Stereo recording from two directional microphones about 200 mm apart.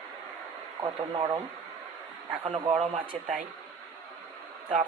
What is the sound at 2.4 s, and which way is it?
Speech, 25° right (ahead or behind).